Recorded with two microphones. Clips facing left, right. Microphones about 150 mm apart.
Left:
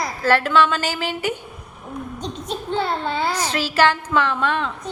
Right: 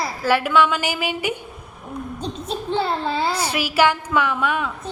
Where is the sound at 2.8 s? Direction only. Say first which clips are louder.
Right 1 dB; centre (ahead or behind).